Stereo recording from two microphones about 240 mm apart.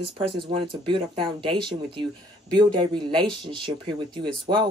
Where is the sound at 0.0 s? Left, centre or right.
Right.